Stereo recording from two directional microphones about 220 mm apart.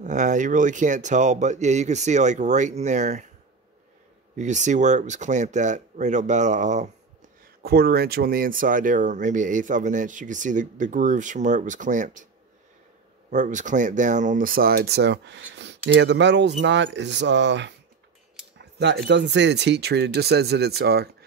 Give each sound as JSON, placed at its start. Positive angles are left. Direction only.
{"t": 0.0, "sound": "speech", "side_deg": -35}
{"t": 4.4, "sound": "speech", "side_deg": -35}
{"t": 7.6, "sound": "speech", "side_deg": -45}
{"t": 13.3, "sound": "speech", "side_deg": -35}
{"t": 18.6, "sound": "cutlery", "side_deg": -50}
{"t": 19.0, "sound": "speech", "side_deg": -50}